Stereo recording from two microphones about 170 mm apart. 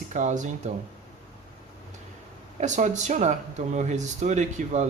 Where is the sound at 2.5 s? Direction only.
45° right (ahead or behind).